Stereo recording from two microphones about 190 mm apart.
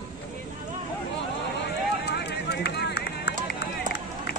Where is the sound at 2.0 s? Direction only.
60° left (ahead or behind).